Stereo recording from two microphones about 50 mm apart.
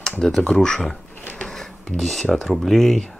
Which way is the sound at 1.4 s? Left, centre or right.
Centre.